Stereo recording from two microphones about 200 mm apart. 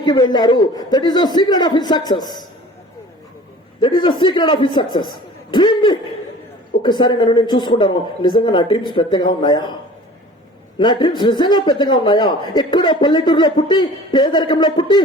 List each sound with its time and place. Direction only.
0.0 s a man's voice: 20° left (ahead or behind)
3.8 s a man's voice: 25° left (ahead or behind)
10.8 s a man's voice: 20° left (ahead or behind)